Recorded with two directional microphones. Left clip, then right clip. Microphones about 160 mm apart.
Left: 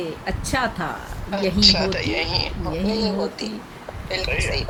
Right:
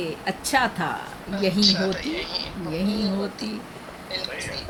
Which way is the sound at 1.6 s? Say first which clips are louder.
Left 6 dB; 40° left (ahead or behind).